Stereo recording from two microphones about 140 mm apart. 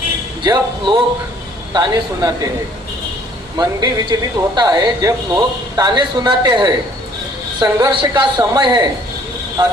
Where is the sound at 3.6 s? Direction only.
30° right (ahead or behind).